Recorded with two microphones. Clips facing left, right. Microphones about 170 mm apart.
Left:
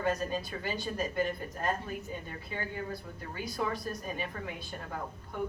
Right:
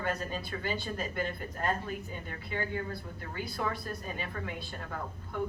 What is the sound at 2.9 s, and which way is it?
Speech, 15° left (ahead or behind).